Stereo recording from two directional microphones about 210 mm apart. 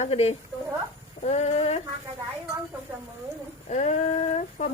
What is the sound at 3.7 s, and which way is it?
A woman's voice, 35° left (ahead or behind).